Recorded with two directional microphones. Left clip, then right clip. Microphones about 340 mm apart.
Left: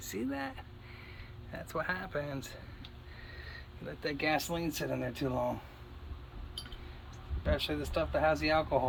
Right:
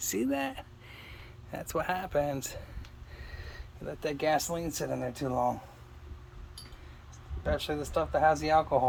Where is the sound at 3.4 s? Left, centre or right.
Right.